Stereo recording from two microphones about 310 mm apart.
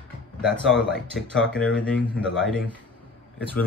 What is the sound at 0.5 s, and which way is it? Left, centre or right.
Speech, centre.